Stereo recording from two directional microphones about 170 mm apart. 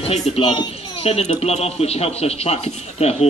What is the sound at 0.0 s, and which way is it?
Speech, 30° left (ahead or behind).